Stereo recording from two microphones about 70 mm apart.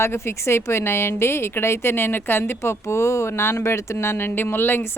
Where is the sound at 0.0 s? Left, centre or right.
Left.